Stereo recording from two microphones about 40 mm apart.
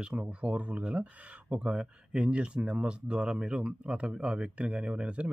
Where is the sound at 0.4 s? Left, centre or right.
Right.